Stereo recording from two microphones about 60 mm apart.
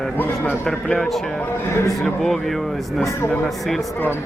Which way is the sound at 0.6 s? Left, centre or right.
Centre.